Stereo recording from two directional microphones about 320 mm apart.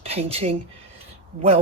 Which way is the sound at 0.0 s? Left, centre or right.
Centre.